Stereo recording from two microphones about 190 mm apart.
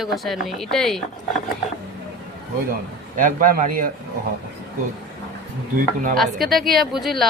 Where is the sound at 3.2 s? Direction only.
45° right (ahead or behind).